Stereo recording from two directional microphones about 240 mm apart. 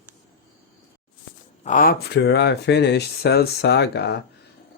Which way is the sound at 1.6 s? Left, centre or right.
Left.